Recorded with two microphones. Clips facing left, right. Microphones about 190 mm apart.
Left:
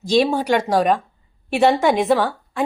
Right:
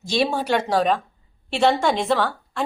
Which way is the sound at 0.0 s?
15° left (ahead or behind).